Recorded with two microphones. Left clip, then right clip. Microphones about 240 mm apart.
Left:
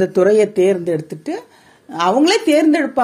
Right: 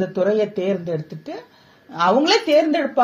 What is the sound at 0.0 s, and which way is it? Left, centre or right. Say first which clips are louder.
A woman's voice: left 6 dB; left.